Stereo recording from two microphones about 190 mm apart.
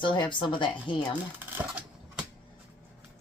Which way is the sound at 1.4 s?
5° right (ahead or behind).